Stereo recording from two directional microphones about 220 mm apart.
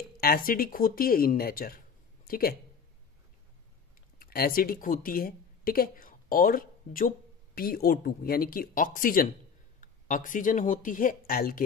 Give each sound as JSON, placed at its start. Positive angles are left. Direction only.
{"t": 0.5, "sound": "speech", "side_deg": 40}
{"t": 4.2, "sound": "speech", "side_deg": 40}